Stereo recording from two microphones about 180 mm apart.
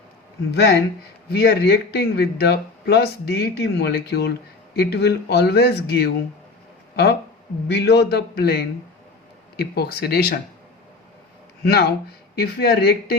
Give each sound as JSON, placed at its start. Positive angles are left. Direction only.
{"t": 1.3, "sound": "speech", "side_deg": 65}
{"t": 11.6, "sound": "speech", "side_deg": 65}